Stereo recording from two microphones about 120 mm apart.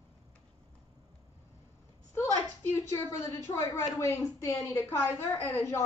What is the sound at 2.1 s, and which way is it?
A woman's voice, 25° left (ahead or behind).